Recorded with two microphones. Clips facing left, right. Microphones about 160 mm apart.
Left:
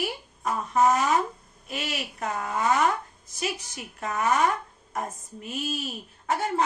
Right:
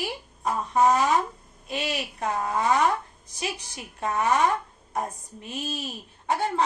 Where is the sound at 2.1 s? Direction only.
25° right (ahead or behind).